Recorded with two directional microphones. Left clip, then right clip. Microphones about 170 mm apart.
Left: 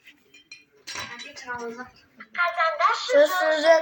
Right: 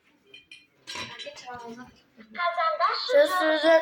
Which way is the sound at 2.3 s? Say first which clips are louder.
Left 3 dB; 15° left (ahead or behind).